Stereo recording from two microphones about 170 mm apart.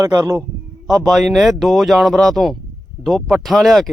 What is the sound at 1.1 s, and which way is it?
Speech, centre (ahead or behind).